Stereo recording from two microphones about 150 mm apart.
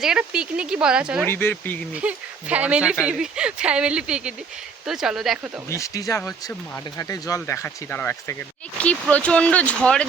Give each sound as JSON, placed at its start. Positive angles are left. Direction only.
{"t": 0.0, "sound": "speech", "side_deg": -5}
{"t": 1.2, "sound": "speech", "side_deg": 15}
{"t": 2.0, "sound": "speech", "side_deg": -10}
{"t": 5.6, "sound": "speech", "side_deg": 20}